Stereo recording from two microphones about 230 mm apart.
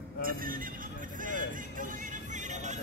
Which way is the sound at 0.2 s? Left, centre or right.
Right.